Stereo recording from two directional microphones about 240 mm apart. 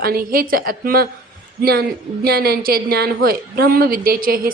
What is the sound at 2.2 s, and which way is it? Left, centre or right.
A woman's voice, right.